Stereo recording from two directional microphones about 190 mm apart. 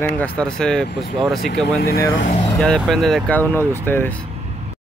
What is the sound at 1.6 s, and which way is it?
Speech, 55° left (ahead or behind).